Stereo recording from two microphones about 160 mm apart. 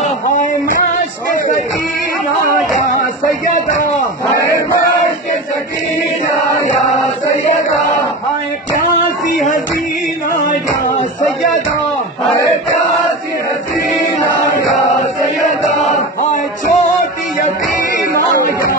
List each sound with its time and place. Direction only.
14.2 s chant: 20° left (ahead or behind)
15.8 s music: 55° left (ahead or behind)